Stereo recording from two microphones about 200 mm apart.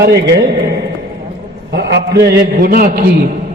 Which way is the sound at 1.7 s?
60° right (ahead or behind).